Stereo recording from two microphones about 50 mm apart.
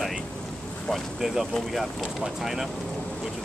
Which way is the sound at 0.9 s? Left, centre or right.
Centre.